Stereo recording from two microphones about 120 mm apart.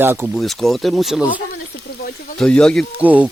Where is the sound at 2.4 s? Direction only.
5° left (ahead or behind).